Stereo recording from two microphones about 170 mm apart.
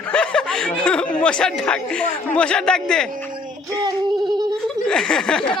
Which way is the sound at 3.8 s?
25° right (ahead or behind).